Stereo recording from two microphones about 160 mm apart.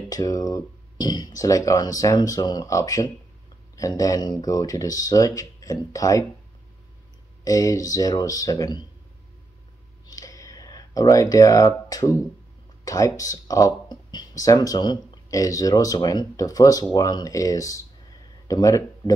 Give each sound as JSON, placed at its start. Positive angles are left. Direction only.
{"t": 0.1, "sound": "speech", "side_deg": 20}
{"t": 7.4, "sound": "speech", "side_deg": 20}
{"t": 10.0, "sound": "a sound", "side_deg": 20}
{"t": 12.8, "sound": "speech", "side_deg": 20}